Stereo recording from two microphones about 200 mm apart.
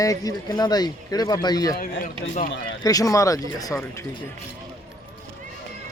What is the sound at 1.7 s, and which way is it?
Speech, 50° left (ahead or behind).